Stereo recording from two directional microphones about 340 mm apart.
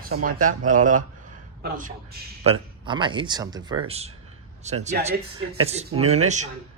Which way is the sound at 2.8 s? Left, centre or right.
Centre.